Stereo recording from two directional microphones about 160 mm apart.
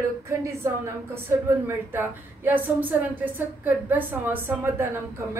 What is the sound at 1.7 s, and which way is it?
A woman's voice, 15° right (ahead or behind).